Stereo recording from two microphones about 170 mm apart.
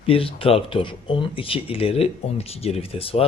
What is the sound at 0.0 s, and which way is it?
Speech, 35° left (ahead or behind).